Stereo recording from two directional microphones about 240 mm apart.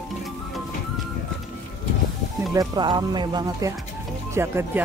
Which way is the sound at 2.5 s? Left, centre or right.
Centre.